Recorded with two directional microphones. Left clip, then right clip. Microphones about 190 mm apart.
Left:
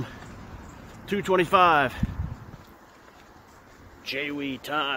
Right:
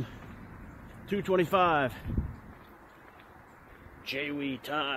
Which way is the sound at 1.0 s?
10° right (ahead or behind).